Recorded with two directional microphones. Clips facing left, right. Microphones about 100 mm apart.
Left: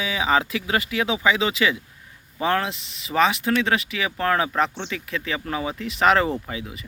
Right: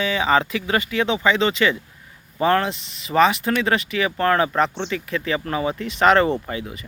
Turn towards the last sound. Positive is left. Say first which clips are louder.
# right 4 dB
turn(degrees=0)  # may be behind; listen again after turning